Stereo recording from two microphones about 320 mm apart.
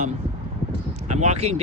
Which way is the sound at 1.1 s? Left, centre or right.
Right.